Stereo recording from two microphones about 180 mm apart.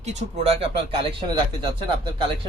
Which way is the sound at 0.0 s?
40° right (ahead or behind).